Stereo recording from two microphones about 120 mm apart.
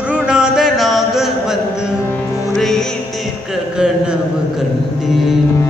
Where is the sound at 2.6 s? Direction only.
5° left (ahead or behind).